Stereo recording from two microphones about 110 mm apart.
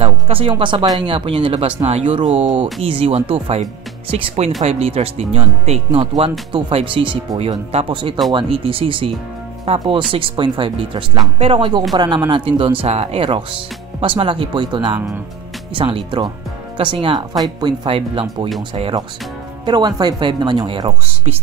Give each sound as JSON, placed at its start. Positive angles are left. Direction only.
{"t": 0.0, "sound": "speech", "side_deg": -55}
{"t": 1.9, "sound": "speech", "side_deg": -80}
{"t": 2.5, "sound": "speech", "side_deg": -50}
{"t": 4.1, "sound": "speech", "side_deg": -55}
{"t": 17.4, "sound": "speech", "side_deg": -40}
{"t": 17.8, "sound": "speech", "side_deg": -55}
{"t": 19.6, "sound": "speech", "side_deg": -40}